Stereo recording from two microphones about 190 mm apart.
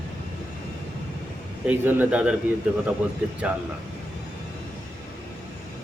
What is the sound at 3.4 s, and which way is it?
Speech, 5° right (ahead or behind).